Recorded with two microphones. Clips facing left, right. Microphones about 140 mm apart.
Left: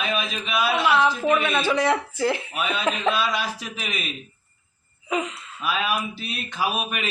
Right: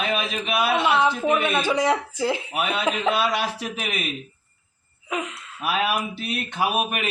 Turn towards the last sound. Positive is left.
turn(degrees=-60)  # may be behind; listen again after turning